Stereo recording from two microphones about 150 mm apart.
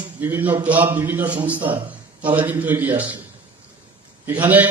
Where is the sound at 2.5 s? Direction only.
10° right (ahead or behind).